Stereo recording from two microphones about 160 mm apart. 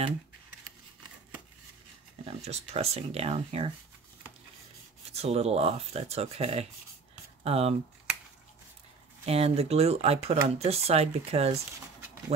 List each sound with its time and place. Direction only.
2.2 s speech: 40° right (ahead or behind)
5.1 s speech: 40° right (ahead or behind)
9.2 s speech: 40° right (ahead or behind)